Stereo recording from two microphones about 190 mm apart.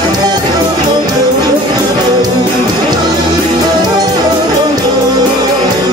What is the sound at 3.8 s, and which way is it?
Music, 20° right (ahead or behind).